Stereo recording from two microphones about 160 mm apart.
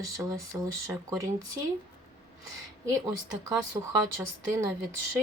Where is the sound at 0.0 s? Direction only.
20° right (ahead or behind).